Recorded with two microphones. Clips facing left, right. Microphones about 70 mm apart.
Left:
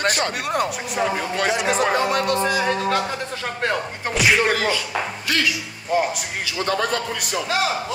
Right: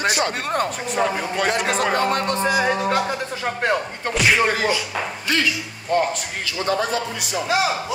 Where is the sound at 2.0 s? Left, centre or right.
Right.